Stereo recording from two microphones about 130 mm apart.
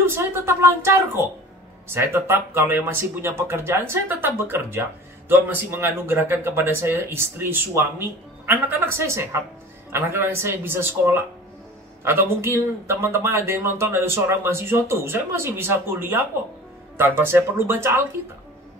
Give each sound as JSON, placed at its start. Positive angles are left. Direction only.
{"t": 0.0, "sound": "a man's voice", "side_deg": -20}